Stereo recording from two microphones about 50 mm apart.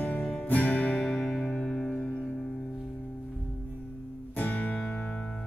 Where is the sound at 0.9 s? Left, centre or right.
Centre.